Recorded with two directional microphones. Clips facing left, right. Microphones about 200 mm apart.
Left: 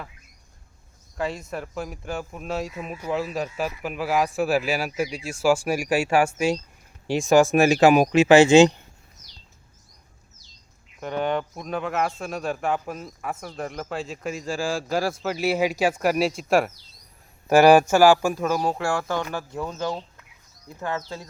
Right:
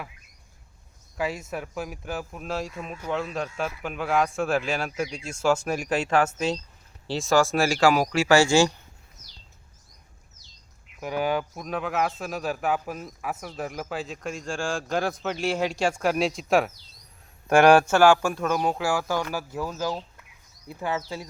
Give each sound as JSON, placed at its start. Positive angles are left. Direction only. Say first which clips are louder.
{"t": 1.1, "sound": "speech", "louder": "left 1 dB", "side_deg": -5}
{"t": 11.0, "sound": "speech", "louder": "left 1 dB", "side_deg": -5}
{"t": 18.6, "sound": "speech", "louder": "even", "side_deg": -5}
{"t": 20.7, "sound": "speech", "louder": "even", "side_deg": -15}